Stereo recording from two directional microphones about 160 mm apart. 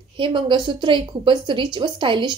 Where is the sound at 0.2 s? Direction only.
30° right (ahead or behind).